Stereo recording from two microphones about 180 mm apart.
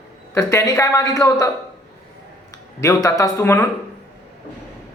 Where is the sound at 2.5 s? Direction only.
15° left (ahead or behind).